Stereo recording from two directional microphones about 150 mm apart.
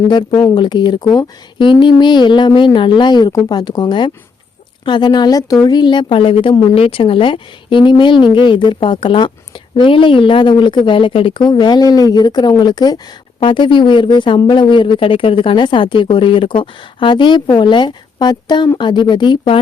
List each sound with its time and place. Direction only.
0.1 s speech: 30° left (ahead or behind)